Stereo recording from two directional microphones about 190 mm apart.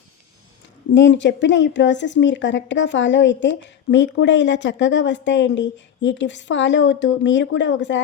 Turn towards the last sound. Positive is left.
turn(degrees=70)  # may be behind; listen again after turning